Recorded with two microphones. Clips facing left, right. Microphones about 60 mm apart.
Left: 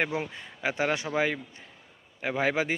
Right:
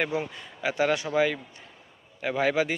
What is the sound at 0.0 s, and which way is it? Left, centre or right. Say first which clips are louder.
Speech: right 1 dB; left.